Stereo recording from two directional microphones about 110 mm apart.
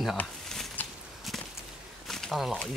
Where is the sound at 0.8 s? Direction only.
15° left (ahead or behind).